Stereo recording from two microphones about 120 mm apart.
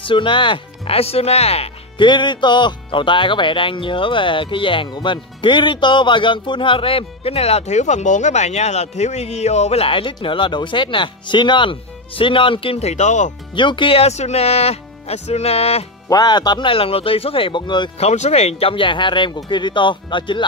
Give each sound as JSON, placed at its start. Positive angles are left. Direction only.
{"t": 0.0, "sound": "speech", "side_deg": 45}
{"t": 2.0, "sound": "speech", "side_deg": 40}
{"t": 13.6, "sound": "speech", "side_deg": 45}
{"t": 16.1, "sound": "speech", "side_deg": 35}
{"t": 17.9, "sound": "speech", "side_deg": 65}